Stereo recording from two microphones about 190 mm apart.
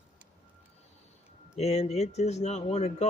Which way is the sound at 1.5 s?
35° left (ahead or behind).